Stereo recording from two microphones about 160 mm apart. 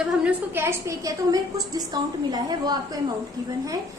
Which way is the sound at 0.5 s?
15° right (ahead or behind).